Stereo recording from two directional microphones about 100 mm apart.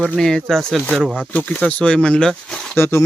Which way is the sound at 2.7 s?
25° left (ahead or behind).